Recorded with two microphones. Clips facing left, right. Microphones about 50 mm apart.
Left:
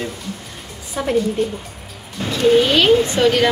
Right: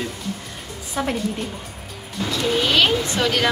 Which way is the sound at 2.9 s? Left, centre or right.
Left.